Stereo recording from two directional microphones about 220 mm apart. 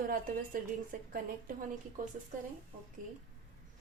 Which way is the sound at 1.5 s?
40° right (ahead or behind).